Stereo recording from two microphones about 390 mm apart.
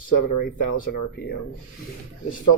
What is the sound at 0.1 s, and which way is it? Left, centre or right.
Speech, left.